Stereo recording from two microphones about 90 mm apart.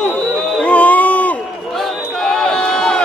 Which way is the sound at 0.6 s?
15° left (ahead or behind).